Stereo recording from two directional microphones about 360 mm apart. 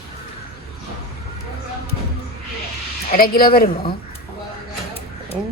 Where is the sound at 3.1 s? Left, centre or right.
Left.